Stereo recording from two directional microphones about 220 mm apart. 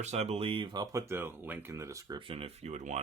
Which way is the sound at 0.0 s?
30° right (ahead or behind).